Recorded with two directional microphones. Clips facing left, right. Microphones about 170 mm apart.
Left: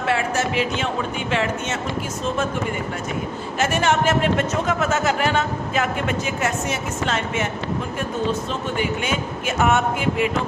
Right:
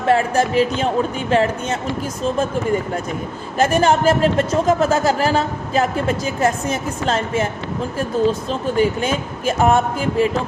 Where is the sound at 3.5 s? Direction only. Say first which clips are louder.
Right 5 dB; 35° right (ahead or behind).